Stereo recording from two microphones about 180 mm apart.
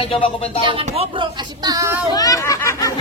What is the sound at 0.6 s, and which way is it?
Speech, 30° right (ahead or behind).